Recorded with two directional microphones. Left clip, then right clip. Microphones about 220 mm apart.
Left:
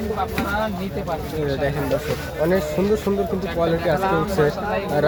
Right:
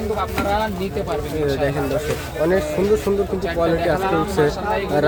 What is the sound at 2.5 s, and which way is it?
Speech, centre (ahead or behind).